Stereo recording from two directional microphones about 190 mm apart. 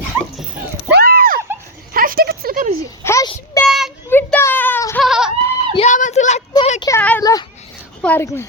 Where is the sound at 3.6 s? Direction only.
Centre (ahead or behind).